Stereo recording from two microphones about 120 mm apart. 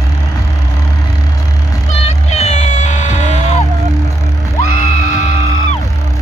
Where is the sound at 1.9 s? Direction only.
60° left (ahead or behind).